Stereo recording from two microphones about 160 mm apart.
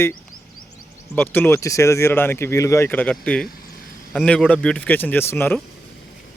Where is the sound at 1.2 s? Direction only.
10° left (ahead or behind).